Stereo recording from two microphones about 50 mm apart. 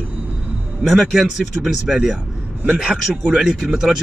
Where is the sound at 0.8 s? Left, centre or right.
Centre.